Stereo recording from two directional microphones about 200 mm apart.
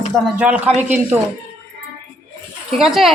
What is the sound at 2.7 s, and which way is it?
Speech, centre (ahead or behind).